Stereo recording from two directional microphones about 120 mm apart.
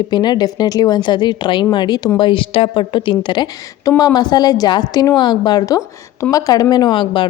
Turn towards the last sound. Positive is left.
turn(degrees=40)  # may be behind; listen again after turning